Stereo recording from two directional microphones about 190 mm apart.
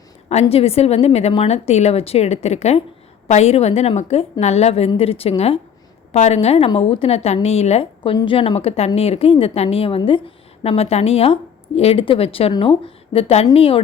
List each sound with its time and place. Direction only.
0.3 s a woman's voice: 35° left (ahead or behind)